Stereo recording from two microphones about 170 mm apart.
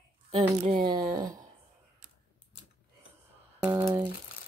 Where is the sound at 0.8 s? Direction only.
25° right (ahead or behind).